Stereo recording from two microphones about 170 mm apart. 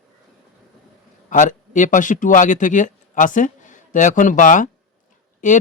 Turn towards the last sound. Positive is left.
turn(degrees=45)  # may be behind; listen again after turning